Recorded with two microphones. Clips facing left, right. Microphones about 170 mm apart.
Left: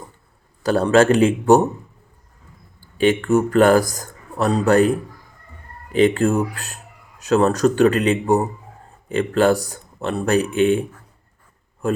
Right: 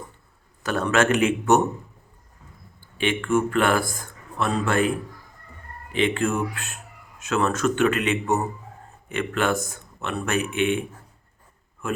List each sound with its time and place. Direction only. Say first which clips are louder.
0.6 s speech: left 7 dB; 35° left (ahead or behind)
2.8 s a man's voice: left 8 dB; 40° left (ahead or behind)